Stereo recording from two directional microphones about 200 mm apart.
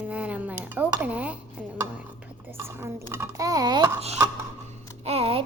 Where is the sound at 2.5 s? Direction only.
10° right (ahead or behind).